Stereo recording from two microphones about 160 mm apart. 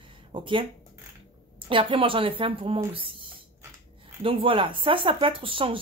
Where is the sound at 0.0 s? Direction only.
30° right (ahead or behind).